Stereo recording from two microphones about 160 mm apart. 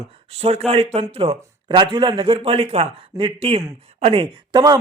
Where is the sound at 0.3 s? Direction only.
40° right (ahead or behind).